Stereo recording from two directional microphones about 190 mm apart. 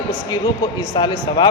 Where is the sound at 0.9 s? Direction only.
25° left (ahead or behind).